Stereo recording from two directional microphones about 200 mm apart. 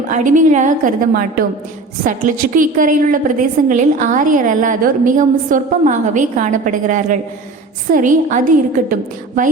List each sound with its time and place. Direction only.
0.1 s a woman's voice: 40° right (ahead or behind)